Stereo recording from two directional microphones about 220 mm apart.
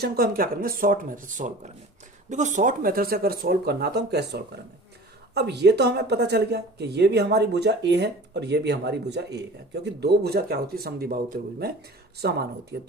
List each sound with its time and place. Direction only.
0.0 s speech: 45° right (ahead or behind)
12.2 s speech: 45° right (ahead or behind)